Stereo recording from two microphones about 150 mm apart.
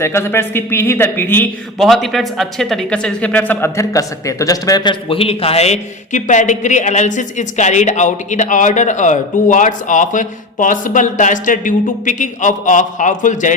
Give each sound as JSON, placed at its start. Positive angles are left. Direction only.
{"t": 0.0, "sound": "speech", "side_deg": 15}
{"t": 1.8, "sound": "speech", "side_deg": 0}